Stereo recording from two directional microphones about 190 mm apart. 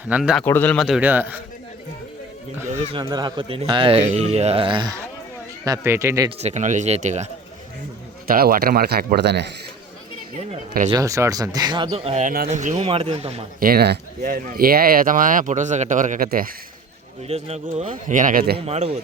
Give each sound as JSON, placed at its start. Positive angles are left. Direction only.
{"t": 0.1, "sound": "a man's voice", "side_deg": -5}
{"t": 0.4, "sound": "a man's voice", "side_deg": 10}
{"t": 2.6, "sound": "speech", "side_deg": -35}
{"t": 3.0, "sound": "a man's voice", "side_deg": -20}
{"t": 6.4, "sound": "speech", "side_deg": -40}
{"t": 8.3, "sound": "speech", "side_deg": -50}
{"t": 10.8, "sound": "speech", "side_deg": -20}
{"t": 13.6, "sound": "speech", "side_deg": -50}
{"t": 17.2, "sound": "speech", "side_deg": -35}
{"t": 18.6, "sound": "speech", "side_deg": -35}